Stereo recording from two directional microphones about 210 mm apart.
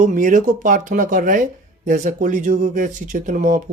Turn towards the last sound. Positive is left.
turn(degrees=-40)  # may be behind; listen again after turning